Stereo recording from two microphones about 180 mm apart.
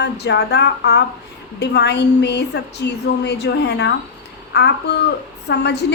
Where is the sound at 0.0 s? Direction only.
70° left (ahead or behind).